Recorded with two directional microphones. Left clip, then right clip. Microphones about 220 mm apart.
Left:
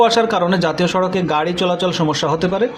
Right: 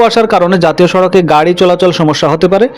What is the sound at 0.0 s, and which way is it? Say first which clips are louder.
A man's voice: right 6 dB; 35° right (ahead or behind).